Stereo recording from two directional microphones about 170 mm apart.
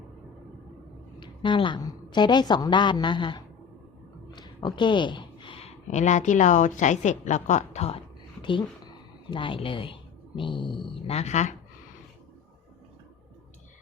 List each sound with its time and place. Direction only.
1.2 s a woman's voice: 30° left (ahead or behind)